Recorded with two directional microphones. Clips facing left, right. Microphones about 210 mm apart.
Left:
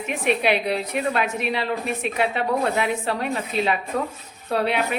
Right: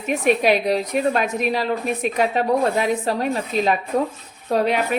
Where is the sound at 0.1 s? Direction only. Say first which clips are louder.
Right 4 dB; 40° right (ahead or behind).